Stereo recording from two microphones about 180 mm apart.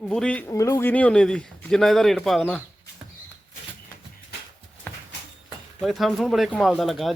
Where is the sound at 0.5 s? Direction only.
15° left (ahead or behind).